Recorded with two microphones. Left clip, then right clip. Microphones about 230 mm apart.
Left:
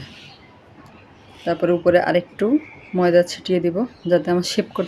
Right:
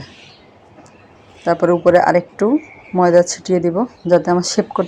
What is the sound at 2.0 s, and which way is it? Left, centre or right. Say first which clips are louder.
Speech: right 6 dB; centre.